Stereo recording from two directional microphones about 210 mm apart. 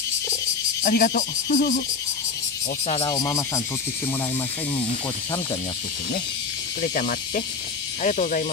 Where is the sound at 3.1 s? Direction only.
15° left (ahead or behind).